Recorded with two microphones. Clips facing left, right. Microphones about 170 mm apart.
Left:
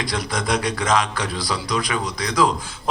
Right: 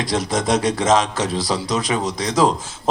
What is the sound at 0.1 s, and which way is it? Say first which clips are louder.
A woman's voice: right 6 dB; 40° right (ahead or behind).